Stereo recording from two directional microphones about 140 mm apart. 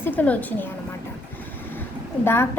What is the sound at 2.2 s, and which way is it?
Speech, 15° left (ahead or behind).